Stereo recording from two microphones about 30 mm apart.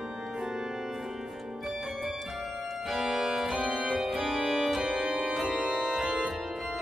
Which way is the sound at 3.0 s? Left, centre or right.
Centre.